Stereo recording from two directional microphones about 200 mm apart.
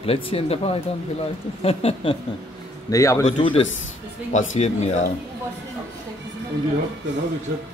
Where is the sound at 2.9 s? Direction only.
15° left (ahead or behind).